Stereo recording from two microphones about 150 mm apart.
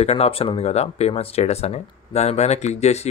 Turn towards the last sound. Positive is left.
turn(degrees=45)  # may be behind; listen again after turning